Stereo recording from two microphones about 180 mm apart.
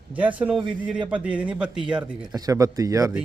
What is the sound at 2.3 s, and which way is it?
Speech, 20° right (ahead or behind).